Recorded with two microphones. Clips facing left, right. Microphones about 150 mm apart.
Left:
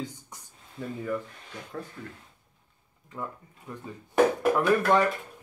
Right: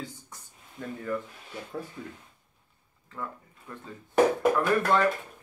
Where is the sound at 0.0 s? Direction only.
15° left (ahead or behind).